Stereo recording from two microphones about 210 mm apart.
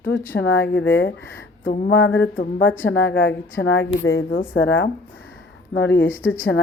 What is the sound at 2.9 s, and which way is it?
A woman's voice, 50° left (ahead or behind).